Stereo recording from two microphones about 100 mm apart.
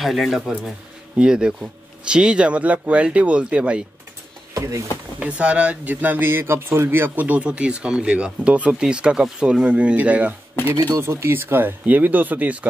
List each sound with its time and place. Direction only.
0.0 s speech: centre (ahead or behind)
4.6 s speech: 35° right (ahead or behind)
5.2 s speech: 10° right (ahead or behind)
11.0 s speech: 25° right (ahead or behind)